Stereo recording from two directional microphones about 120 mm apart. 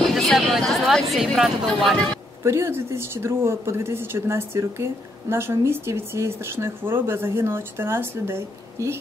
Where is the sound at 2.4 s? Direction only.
20° right (ahead or behind).